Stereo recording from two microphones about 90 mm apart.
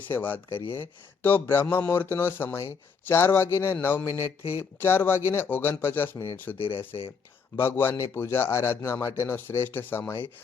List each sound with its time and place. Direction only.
0.1 s a man's voice: 25° left (ahead or behind)
1.6 s a sound: 15° left (ahead or behind)
1.9 s a man's voice: 25° left (ahead or behind)